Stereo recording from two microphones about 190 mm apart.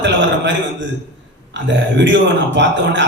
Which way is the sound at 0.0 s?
70° right (ahead or behind).